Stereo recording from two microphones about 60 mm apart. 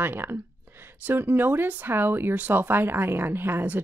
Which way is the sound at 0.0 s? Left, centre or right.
Right.